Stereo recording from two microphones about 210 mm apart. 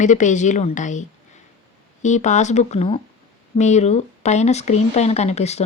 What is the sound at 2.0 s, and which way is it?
Speech, 35° left (ahead or behind).